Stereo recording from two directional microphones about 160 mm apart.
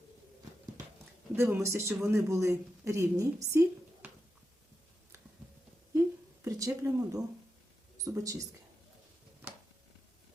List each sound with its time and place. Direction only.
1.4 s a woman's voice: 15° right (ahead or behind)
6.4 s speech: 20° right (ahead or behind)